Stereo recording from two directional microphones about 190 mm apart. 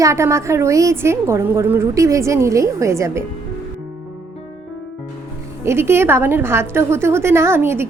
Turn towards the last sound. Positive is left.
turn(degrees=-10)  # may be behind; listen again after turning